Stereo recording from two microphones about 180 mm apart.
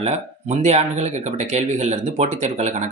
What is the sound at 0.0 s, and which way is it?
Speech, 40° right (ahead or behind).